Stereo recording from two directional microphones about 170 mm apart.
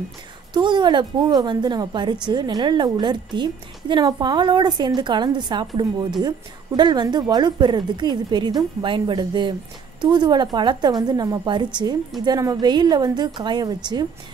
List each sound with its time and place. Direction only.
0.5 s a woman's voice: 25° right (ahead or behind)